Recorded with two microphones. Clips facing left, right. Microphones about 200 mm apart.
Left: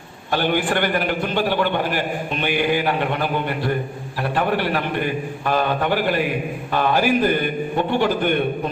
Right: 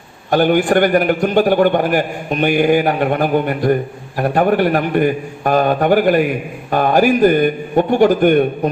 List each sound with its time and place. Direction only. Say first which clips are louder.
0.3 s a man's voice: right 7 dB; 45° right (ahead or behind)